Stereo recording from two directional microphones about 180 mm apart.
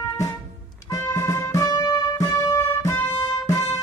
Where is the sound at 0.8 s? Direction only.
15° left (ahead or behind).